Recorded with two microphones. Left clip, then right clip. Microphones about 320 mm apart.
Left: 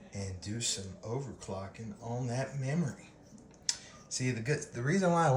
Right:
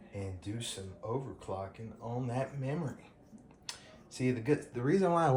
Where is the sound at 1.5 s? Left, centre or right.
Centre.